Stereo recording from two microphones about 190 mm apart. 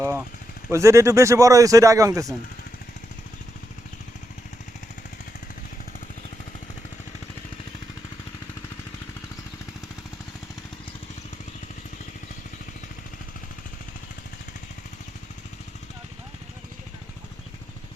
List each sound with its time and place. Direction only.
0.0 s vehicle: 10° right (ahead or behind)
0.7 s speech: 15° right (ahead or behind)